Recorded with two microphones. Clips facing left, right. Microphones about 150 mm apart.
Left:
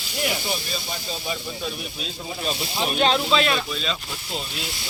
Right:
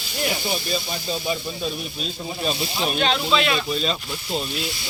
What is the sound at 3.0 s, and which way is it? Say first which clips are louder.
Speech: left 2 dB; 35° left (ahead or behind).